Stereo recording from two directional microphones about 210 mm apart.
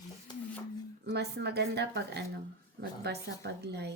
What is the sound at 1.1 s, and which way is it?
A woman's voice, 50° right (ahead or behind).